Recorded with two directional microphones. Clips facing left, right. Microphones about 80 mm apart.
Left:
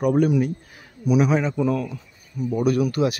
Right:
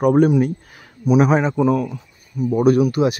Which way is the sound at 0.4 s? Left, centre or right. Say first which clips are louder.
Right 4 dB; right.